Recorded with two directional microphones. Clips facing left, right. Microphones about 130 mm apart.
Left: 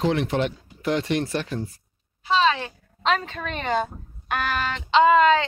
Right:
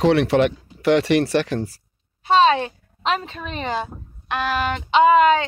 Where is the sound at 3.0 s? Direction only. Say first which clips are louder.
Even; 5° right (ahead or behind).